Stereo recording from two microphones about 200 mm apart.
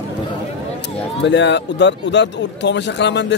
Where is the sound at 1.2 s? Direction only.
60° left (ahead or behind).